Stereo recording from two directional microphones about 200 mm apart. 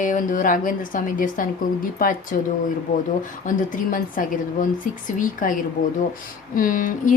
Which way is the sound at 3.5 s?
40° left (ahead or behind).